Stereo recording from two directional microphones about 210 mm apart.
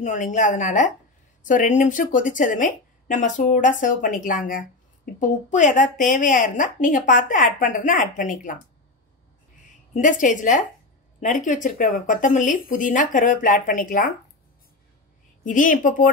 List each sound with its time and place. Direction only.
0.0 s a woman's voice: 35° left (ahead or behind)
9.9 s a woman's voice: 35° left (ahead or behind)
15.4 s a woman's voice: 40° left (ahead or behind)